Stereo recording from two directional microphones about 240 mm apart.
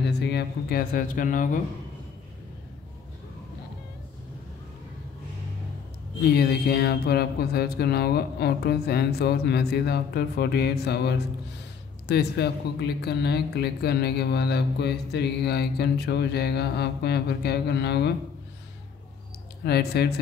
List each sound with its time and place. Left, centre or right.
0.2 s speech: left
6.2 s speech: left
19.6 s speech: left